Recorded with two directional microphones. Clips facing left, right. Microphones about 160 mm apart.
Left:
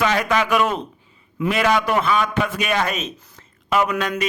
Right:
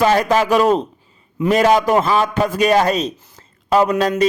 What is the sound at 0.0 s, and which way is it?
A man's voice, 35° right (ahead or behind).